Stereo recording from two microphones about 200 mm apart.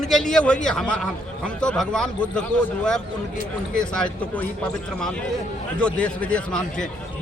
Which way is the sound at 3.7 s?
5° left (ahead or behind).